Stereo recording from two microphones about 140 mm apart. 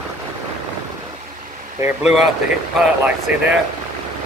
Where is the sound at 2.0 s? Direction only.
Centre (ahead or behind).